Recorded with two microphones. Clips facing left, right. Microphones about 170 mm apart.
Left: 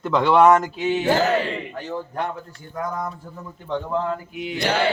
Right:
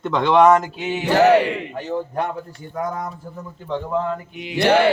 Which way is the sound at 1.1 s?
70° right (ahead or behind).